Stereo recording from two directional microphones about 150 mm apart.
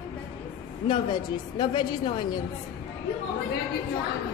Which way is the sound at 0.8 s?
30° left (ahead or behind).